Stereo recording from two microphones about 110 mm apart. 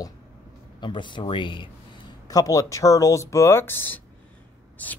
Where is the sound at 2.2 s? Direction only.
30° left (ahead or behind); by 4.9 s 15° left (ahead or behind).